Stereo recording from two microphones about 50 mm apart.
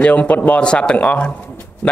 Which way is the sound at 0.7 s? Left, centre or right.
Left.